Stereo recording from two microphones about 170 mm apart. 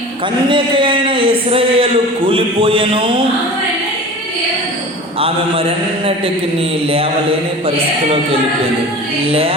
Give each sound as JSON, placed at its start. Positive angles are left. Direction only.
{"t": 0.4, "sound": "a man's voice", "side_deg": -30}
{"t": 6.9, "sound": "a man's voice", "side_deg": -35}